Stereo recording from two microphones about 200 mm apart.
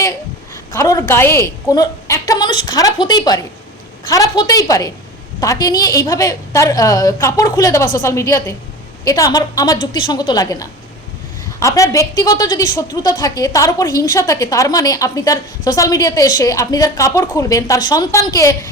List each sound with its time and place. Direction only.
0.7 s a woman's voice: 15° left (ahead or behind)